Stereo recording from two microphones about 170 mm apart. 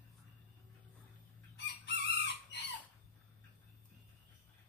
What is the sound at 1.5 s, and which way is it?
Chicken, 90° left.